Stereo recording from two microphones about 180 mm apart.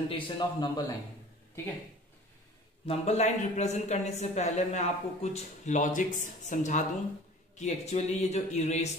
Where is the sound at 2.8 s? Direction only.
40° left (ahead or behind).